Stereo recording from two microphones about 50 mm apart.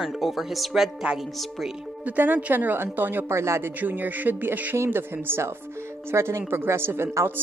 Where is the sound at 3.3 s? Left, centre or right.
Right.